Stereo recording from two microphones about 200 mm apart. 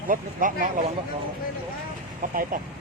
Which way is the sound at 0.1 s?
45° right (ahead or behind).